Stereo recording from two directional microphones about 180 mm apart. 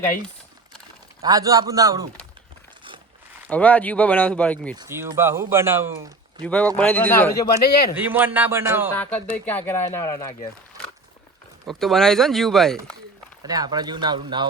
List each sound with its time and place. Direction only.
1.2 s speech: 20° right (ahead or behind)
3.5 s speech: 10° left (ahead or behind)
4.8 s speech: 15° right (ahead or behind)
6.4 s speech: 5° left (ahead or behind)
7.6 s a man's voice: 60° left (ahead or behind)
7.9 s speech: 10° right (ahead or behind)
9.0 s speech: 10° left (ahead or behind)
11.6 s speech: centre (ahead or behind)
13.4 s speech: 20° right (ahead or behind)